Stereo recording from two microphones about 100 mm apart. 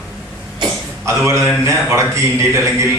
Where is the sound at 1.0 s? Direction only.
30° right (ahead or behind).